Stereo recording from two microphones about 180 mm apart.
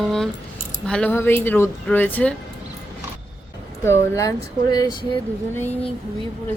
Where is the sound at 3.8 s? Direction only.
15° left (ahead or behind).